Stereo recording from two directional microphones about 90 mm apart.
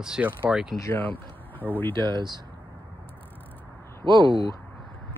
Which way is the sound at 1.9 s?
55° right (ahead or behind).